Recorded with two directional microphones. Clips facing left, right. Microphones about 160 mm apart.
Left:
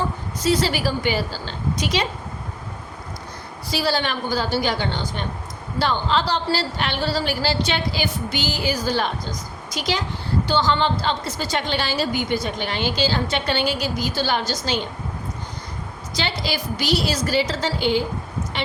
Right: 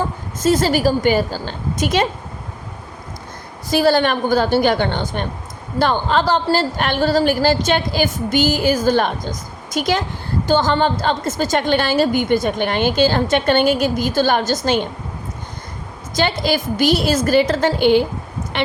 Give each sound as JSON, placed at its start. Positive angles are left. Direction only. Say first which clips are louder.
{"t": 0.3, "sound": "a woman's voice", "louder": "right 5 dB", "side_deg": -45}
{"t": 3.7, "sound": "a woman's voice", "louder": "right 8 dB", "side_deg": -50}
{"t": 16.1, "sound": "a woman's voice", "louder": "right 8 dB", "side_deg": -50}
{"t": 18.5, "sound": "vehicle", "louder": "right 7 dB", "side_deg": -60}